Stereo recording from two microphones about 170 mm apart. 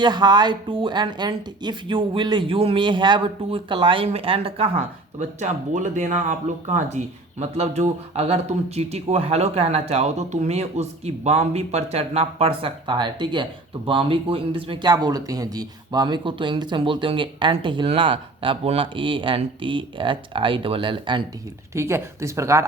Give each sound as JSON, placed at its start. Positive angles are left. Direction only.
{"t": 0.0, "sound": "speech", "side_deg": -25}
{"t": 5.2, "sound": "speech", "side_deg": -45}
{"t": 21.8, "sound": "speech", "side_deg": -15}